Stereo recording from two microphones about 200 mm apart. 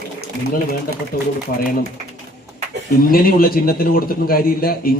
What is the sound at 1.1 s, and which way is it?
Speech, 45° left (ahead or behind).